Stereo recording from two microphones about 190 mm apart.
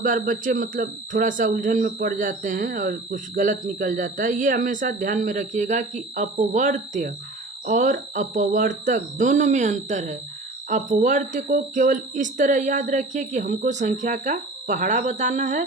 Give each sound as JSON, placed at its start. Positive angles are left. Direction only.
{"t": 0.0, "sound": "speech", "side_deg": -45}